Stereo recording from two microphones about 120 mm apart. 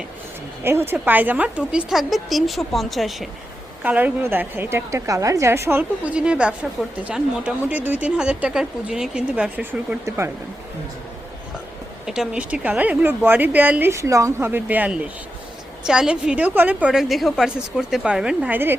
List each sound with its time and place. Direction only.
0.6 s a woman's voice: 20° right (ahead or behind); by 3.2 s centre (ahead or behind)
3.8 s a woman's voice: 15° right (ahead or behind)
6.1 s a woman's voice: 10° right (ahead or behind)
12.0 s a woman's voice: 5° right (ahead or behind)
16.9 s a woman's voice: centre (ahead or behind)